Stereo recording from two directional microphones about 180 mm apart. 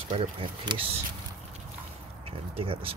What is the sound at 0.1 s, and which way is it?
Speech, 25° right (ahead or behind).